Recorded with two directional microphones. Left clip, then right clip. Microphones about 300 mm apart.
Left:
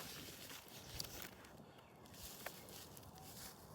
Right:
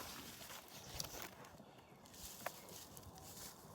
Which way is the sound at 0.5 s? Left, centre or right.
Centre.